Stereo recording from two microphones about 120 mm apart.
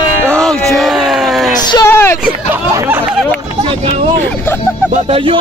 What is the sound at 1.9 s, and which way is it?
Speech, 20° left (ahead or behind).